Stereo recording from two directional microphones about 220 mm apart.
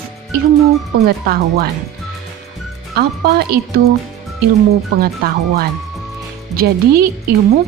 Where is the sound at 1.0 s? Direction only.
45° right (ahead or behind).